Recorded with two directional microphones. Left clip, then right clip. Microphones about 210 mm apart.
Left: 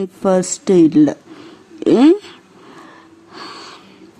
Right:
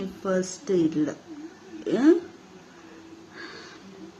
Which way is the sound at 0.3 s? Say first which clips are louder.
Left 11 dB; 50° left (ahead or behind).